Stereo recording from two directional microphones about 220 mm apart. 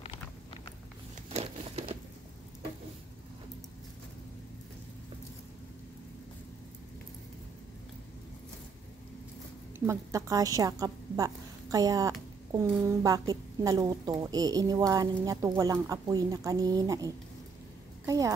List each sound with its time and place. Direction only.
1.3 s crumpling: 30° right (ahead or behind)
9.8 s a woman's voice: 15° right (ahead or behind)